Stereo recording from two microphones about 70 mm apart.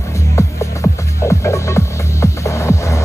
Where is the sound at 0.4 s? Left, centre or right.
Left.